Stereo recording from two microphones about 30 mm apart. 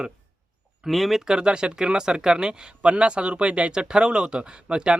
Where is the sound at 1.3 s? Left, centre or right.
Right.